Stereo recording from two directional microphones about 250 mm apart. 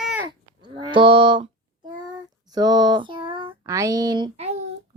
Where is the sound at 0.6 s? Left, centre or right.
Centre.